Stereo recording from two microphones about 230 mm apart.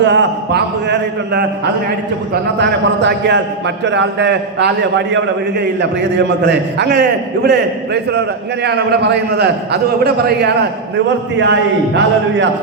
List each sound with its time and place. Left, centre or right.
0.0 s a man's voice: right